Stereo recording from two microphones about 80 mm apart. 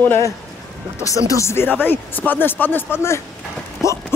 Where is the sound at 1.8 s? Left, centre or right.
Left.